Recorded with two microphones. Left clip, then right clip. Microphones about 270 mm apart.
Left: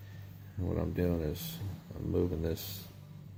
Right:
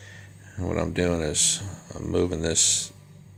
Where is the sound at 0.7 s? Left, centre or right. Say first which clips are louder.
Right 9 dB; centre.